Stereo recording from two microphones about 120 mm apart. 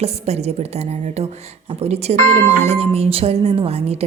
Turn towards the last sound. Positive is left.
turn(degrees=-60)  # may be behind; listen again after turning